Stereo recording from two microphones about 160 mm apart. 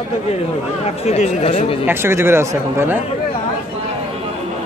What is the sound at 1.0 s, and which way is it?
Speech, 40° left (ahead or behind).